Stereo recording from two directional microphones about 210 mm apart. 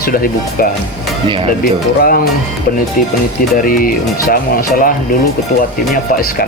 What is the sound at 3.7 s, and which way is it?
Speech, 40° left (ahead or behind).